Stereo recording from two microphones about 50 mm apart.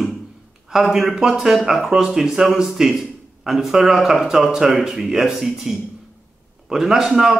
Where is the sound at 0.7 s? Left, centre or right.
Centre.